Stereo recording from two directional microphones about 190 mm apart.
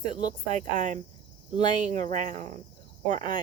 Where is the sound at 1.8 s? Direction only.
40° right (ahead or behind).